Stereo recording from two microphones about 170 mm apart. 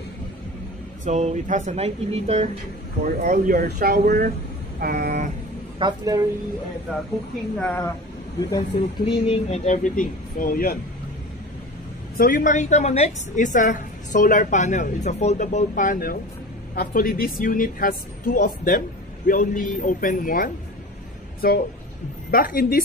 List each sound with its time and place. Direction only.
1.0 s speech: 45° right (ahead or behind)
3.2 s speech: 50° right (ahead or behind)
5.8 s a woman's voice: 25° right (ahead or behind)
7.5 s a woman's voice: 10° left (ahead or behind)
8.4 s speech: 25° left (ahead or behind); by 10.8 s 60° left (ahead or behind)
12.2 s a woman's voice: 55° left (ahead or behind)
22.3 s a woman's voice: 55° left (ahead or behind)